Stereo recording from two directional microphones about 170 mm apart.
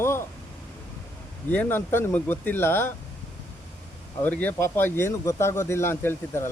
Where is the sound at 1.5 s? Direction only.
10° left (ahead or behind).